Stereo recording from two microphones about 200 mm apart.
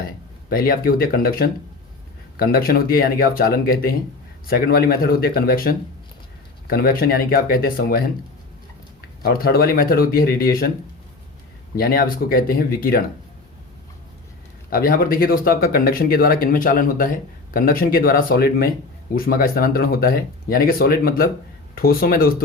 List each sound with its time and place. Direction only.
0.5 s speech: 50° left (ahead or behind)
9.2 s speech: 50° left (ahead or behind)
11.8 s speech: 50° left (ahead or behind)
14.7 s speech: 45° left (ahead or behind)